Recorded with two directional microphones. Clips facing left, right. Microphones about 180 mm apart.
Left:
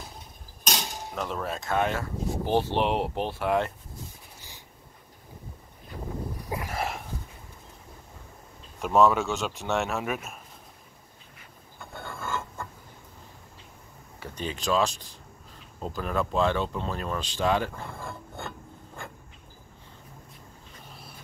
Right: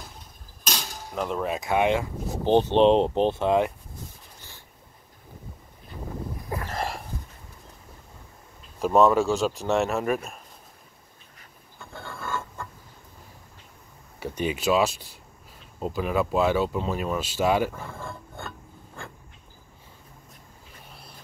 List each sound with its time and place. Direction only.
0.7 s cutlery: 5° right (ahead or behind)
1.7 s speech: 15° right (ahead or behind)
6.5 s a sound: 10° left (ahead or behind)
8.9 s speech: centre (ahead or behind)
12.0 s filing: 20° left (ahead or behind)
14.2 s speech: 10° right (ahead or behind)